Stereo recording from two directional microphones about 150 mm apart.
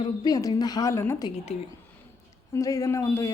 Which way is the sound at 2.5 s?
20° left (ahead or behind).